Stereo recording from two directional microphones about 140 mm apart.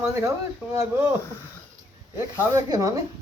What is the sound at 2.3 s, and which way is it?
Speech, 20° right (ahead or behind).